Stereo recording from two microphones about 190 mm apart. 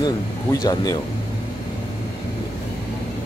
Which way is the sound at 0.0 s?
20° left (ahead or behind).